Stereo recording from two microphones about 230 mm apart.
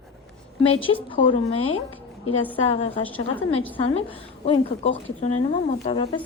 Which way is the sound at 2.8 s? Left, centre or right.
Left.